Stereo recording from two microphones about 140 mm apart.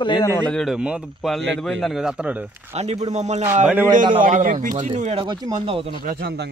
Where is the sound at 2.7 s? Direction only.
50° right (ahead or behind).